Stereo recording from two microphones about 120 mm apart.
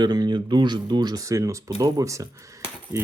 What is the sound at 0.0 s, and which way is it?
Speech, 35° right (ahead or behind).